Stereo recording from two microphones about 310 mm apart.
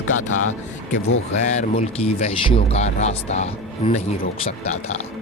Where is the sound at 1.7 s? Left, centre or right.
Centre.